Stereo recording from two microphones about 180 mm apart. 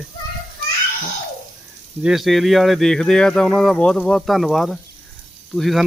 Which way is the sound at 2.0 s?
5° right (ahead or behind).